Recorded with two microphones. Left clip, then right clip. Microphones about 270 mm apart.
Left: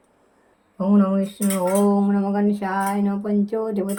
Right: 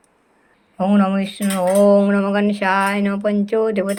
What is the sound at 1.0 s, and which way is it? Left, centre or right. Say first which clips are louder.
Speech: right 2 dB; centre.